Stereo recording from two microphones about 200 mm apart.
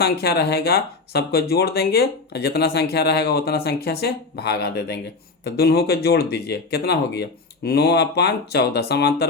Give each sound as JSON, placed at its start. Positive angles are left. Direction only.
{"t": 0.0, "sound": "speech", "side_deg": 55}